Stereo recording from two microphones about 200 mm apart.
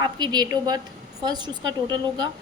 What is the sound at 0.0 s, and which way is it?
A woman's voice, 20° right (ahead or behind).